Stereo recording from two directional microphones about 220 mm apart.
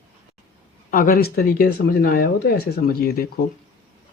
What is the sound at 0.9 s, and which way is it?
Speech, 40° left (ahead or behind).